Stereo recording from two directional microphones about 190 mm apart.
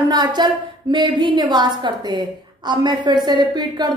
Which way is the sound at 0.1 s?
20° right (ahead or behind).